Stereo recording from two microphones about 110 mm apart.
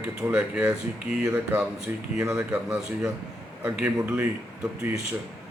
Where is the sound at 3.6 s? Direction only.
15° right (ahead or behind).